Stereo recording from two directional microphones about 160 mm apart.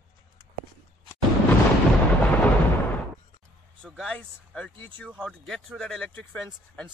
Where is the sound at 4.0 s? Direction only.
5° left (ahead or behind).